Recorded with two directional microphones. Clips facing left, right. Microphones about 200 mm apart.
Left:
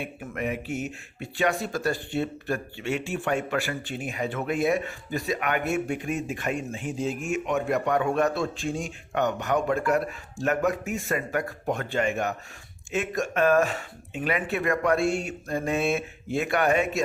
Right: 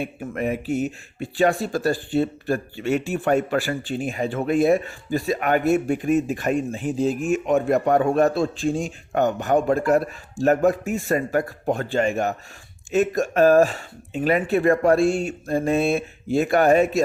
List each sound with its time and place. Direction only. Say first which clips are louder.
0.0 s speech: right 5 dB; 35° right (ahead or behind)